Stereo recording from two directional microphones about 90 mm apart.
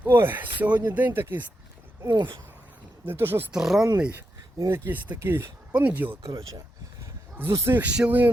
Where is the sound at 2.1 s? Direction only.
60° right (ahead or behind).